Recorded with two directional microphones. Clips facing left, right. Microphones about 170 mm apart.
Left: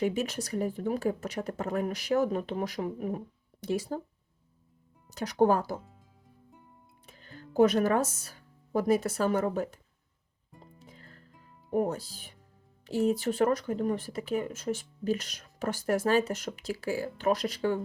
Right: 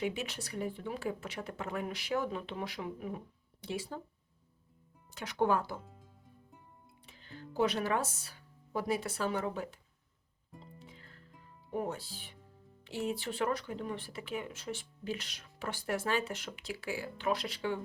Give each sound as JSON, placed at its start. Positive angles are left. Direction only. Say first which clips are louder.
{"t": 0.0, "sound": "speech", "louder": "left 7 dB", "side_deg": 40}
{"t": 5.0, "sound": "speech", "louder": "left 7 dB", "side_deg": 40}
{"t": 7.0, "sound": "speech", "louder": "even", "side_deg": 45}
{"t": 10.6, "sound": "music", "louder": "left 2 dB", "side_deg": 45}
{"t": 11.7, "sound": "speech", "louder": "left 8 dB", "side_deg": 40}